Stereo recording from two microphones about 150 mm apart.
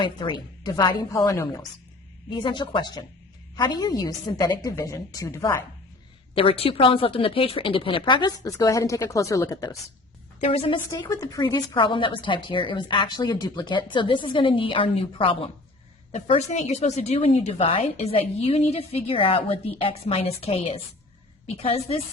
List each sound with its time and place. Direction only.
0.0 s a woman's voice: 30° left (ahead or behind)
6.3 s a woman's voice: 40° left (ahead or behind)
10.4 s speech: 40° left (ahead or behind)
11.1 s a woman's voice: 20° left (ahead or behind); by 22.0 s 40° left (ahead or behind)